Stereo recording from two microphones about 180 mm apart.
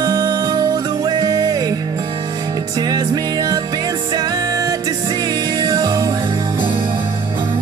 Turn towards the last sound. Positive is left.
turn(degrees=-30)  # may be behind; listen again after turning